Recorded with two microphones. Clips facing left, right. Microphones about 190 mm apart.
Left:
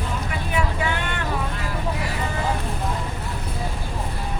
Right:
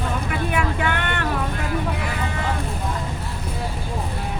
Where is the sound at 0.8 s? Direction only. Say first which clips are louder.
Right 2 dB; 60° right (ahead or behind).